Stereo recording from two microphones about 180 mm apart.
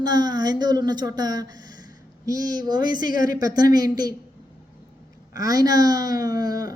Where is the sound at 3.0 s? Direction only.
50° left (ahead or behind).